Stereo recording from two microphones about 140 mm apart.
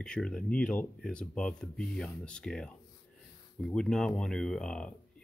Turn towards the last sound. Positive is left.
turn(degrees=5)  # may be behind; listen again after turning